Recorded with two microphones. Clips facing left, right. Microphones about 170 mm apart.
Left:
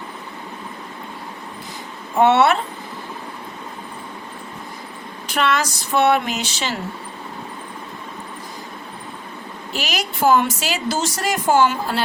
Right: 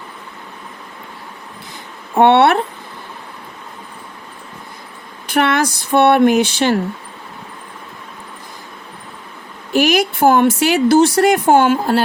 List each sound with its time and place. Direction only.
2.1 s speech: 60° right (ahead or behind)
5.3 s speech: 55° right (ahead or behind)
9.7 s speech: 55° right (ahead or behind)